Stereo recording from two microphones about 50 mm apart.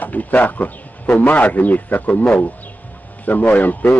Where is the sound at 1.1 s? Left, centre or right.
Left.